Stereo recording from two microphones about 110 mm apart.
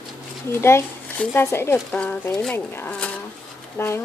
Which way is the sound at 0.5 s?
20° left (ahead or behind).